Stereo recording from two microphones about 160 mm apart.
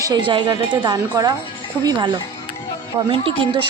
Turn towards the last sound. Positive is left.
turn(degrees=-30)  # may be behind; listen again after turning